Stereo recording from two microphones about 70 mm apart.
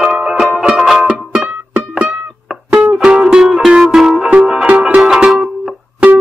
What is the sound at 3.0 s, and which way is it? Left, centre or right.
Music, centre.